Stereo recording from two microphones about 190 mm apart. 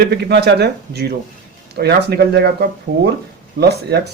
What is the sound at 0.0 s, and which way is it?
Speech, 60° right (ahead or behind).